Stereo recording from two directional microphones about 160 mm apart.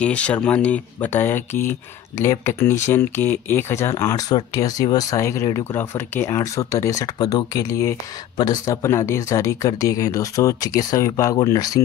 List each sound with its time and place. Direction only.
0.0 s speech: 10° left (ahead or behind)